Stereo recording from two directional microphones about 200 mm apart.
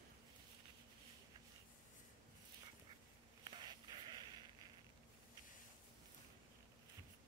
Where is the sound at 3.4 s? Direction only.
20° right (ahead or behind).